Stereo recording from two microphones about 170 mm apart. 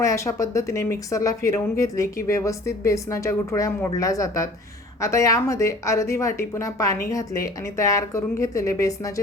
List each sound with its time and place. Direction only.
0.0 s speech: 20° left (ahead or behind)